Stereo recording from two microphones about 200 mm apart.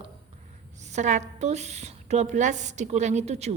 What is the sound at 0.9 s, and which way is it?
A woman's voice, 35° right (ahead or behind).